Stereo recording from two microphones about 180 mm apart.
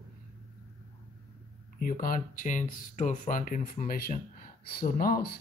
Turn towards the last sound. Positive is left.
turn(degrees=55)  # may be behind; listen again after turning